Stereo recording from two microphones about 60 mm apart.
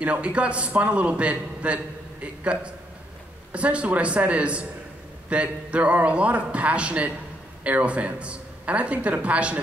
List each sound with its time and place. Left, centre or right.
0.0 s a woman's voice: right